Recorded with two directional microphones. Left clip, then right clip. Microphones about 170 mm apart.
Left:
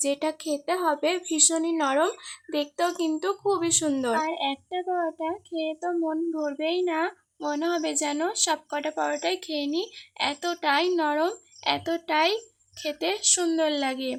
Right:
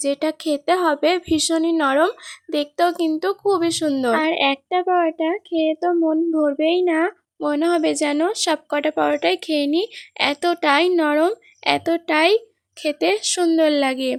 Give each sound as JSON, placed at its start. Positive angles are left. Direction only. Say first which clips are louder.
{"t": 0.0, "sound": "speech", "louder": "right 6 dB", "side_deg": -35}